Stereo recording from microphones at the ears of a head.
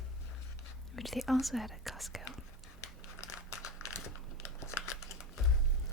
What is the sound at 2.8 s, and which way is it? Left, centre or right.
Crumpling, left.